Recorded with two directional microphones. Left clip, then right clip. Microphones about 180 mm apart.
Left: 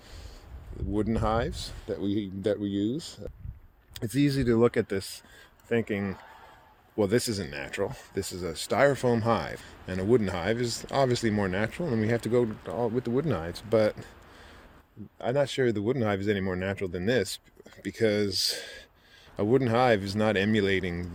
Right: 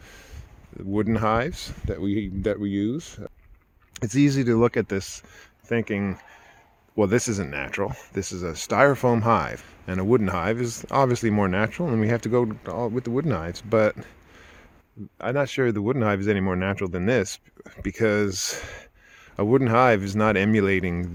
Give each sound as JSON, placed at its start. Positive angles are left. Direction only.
{"t": 0.9, "sound": "speech", "side_deg": -50}